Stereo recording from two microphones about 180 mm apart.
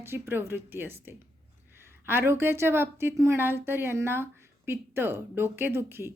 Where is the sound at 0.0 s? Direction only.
10° right (ahead or behind).